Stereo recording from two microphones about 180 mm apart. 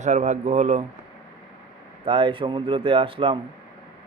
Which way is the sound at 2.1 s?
30° right (ahead or behind).